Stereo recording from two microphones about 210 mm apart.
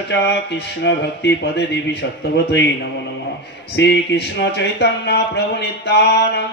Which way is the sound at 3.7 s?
55° left (ahead or behind).